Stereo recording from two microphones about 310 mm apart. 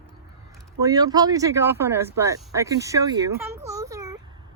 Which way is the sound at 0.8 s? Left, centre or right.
Centre.